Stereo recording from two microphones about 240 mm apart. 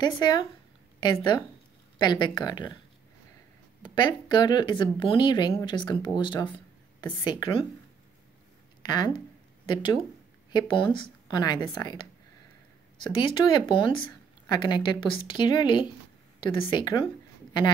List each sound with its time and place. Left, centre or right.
0.0 s a woman's voice: centre
3.9 s speech: centre
8.9 s a woman's voice: centre
10.5 s a woman's voice: centre
13.3 s a woman's voice: centre